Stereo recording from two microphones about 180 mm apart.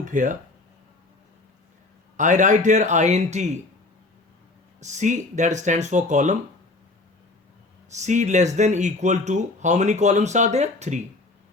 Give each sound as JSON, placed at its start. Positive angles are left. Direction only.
{"t": 0.0, "sound": "speech", "side_deg": -45}
{"t": 2.1, "sound": "speech", "side_deg": -45}
{"t": 4.8, "sound": "speech", "side_deg": -40}
{"t": 7.9, "sound": "speech", "side_deg": -40}